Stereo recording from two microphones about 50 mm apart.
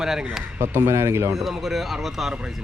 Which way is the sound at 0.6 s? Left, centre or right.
Right.